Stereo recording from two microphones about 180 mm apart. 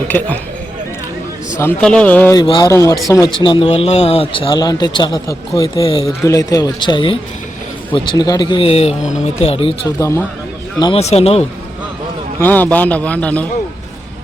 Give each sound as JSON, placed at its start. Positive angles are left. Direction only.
{"t": 0.1, "sound": "speech", "side_deg": 10}
{"t": 1.5, "sound": "a man's voice", "side_deg": 10}
{"t": 2.3, "sound": "speech", "side_deg": 25}
{"t": 10.0, "sound": "a man's voice", "side_deg": 15}
{"t": 11.0, "sound": "speech", "side_deg": 35}
{"t": 12.4, "sound": "a man's voice", "side_deg": 10}